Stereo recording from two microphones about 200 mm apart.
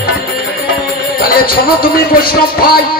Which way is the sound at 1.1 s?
45° left (ahead or behind).